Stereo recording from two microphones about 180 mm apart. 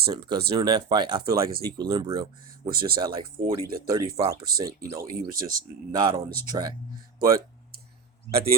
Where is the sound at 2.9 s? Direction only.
25° right (ahead or behind).